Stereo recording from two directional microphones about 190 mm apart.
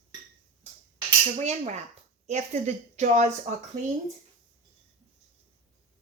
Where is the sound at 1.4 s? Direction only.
35° right (ahead or behind).